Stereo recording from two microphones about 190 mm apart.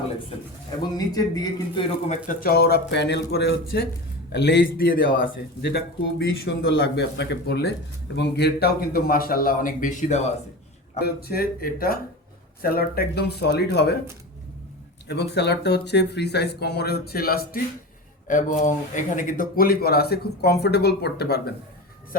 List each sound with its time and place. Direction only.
0.9 s speech: 20° left (ahead or behind)
2.0 s a man's voice: 45° left (ahead or behind)
11.0 s a man's voice: 55° left (ahead or behind)
15.0 s speech: 60° left (ahead or behind)